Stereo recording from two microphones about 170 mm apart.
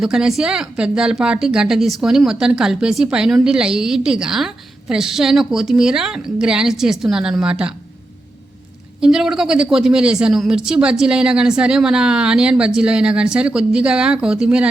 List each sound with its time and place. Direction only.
0.0 s speech: 5° right (ahead or behind)
9.0 s speech: 5° right (ahead or behind)